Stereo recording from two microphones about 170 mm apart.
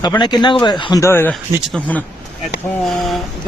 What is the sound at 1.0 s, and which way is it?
Speech, 15° left (ahead or behind).